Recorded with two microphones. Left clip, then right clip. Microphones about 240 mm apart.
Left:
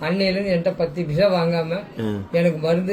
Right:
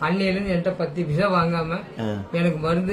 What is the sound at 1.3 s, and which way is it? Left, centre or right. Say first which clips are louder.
Speech: left 1 dB; right.